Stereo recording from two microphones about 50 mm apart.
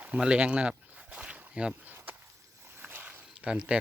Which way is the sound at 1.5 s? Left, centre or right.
Right.